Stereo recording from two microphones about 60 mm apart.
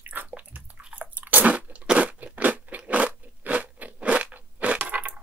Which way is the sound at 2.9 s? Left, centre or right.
Right.